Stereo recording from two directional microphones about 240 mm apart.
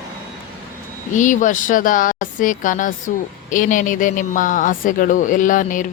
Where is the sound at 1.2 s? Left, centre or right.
Left.